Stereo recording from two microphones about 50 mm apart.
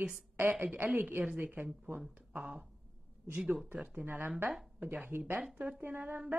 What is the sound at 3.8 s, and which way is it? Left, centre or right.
Speech, right.